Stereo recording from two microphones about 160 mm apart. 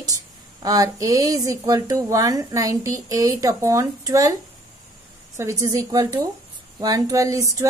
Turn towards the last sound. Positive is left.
turn(degrees=-20)  # may be behind; listen again after turning